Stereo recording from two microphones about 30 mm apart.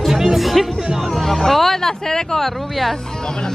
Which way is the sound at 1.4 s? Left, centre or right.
Centre.